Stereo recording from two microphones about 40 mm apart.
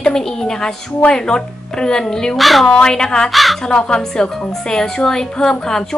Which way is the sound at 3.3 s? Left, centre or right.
Centre.